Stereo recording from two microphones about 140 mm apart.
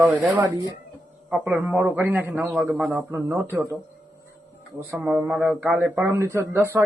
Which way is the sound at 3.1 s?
20° right (ahead or behind).